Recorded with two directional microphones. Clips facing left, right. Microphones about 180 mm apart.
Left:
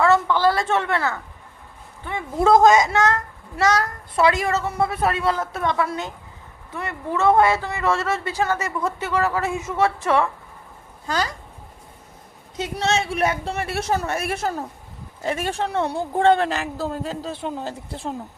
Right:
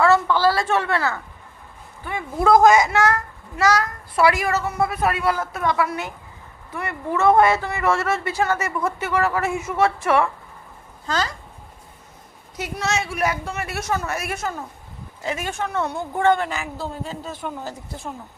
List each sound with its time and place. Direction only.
0.0 s a woman's voice: 20° left (ahead or behind)
12.5 s a child's voice: 25° left (ahead or behind)
16.7 s a woman's voice: 40° left (ahead or behind)